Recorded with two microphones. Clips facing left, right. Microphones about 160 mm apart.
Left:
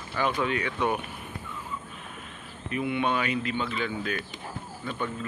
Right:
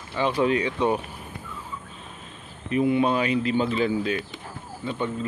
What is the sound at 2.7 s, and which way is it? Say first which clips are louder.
Speech: right 6 dB; 35° right (ahead or behind).